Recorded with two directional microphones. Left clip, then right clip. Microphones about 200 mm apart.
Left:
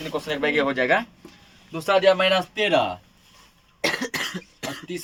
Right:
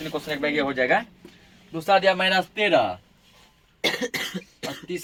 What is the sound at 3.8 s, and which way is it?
Cough, 30° left (ahead or behind).